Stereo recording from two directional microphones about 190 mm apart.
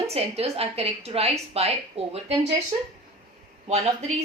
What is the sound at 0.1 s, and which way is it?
A woman's voice, 30° right (ahead or behind).